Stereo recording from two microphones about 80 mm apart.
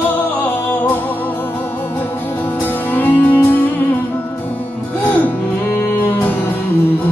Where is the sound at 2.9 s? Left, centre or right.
Left.